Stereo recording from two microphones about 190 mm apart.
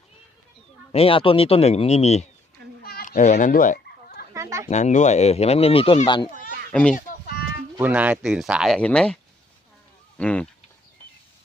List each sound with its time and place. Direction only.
0.9 s speech: 30° left (ahead or behind)
2.8 s children playing: 50° left (ahead or behind)
4.4 s a sound: 15° right (ahead or behind)
4.7 s speech: 40° left (ahead or behind)
6.3 s children playing: 45° right (ahead or behind)
6.7 s speech: 5° left (ahead or behind)
6.9 s a sound: 50° left (ahead or behind)
7.8 s speech: 10° right (ahead or behind)
10.2 s speech: 5° left (ahead or behind)